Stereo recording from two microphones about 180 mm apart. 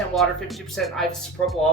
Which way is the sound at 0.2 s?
Centre (ahead or behind).